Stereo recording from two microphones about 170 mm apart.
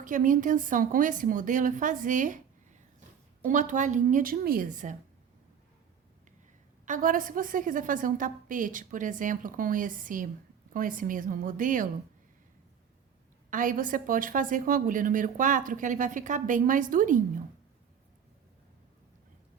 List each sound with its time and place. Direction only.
0.0 s a woman's voice: 50° right (ahead or behind)
3.4 s a woman's voice: 50° right (ahead or behind)
6.8 s a woman's voice: 50° right (ahead or behind)
13.5 s a woman's voice: 50° right (ahead or behind)